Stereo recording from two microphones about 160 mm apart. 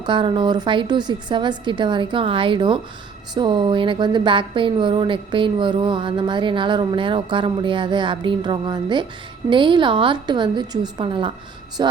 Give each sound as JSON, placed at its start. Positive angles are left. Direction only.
{"t": 0.0, "sound": "a woman's voice", "side_deg": -30}